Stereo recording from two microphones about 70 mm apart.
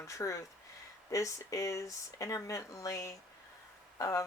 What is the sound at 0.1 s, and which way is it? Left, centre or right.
Speech, left.